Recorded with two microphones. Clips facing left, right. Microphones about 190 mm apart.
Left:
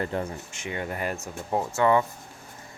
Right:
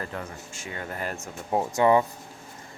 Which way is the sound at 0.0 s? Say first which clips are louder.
Left 6 dB; 30° left (ahead or behind).